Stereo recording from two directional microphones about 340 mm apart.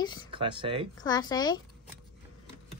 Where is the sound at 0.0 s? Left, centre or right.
Centre.